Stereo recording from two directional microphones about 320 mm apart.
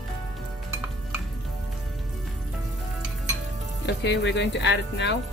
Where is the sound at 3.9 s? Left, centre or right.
Left.